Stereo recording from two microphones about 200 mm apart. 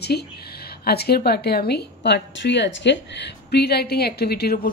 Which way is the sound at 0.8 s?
50° left (ahead or behind).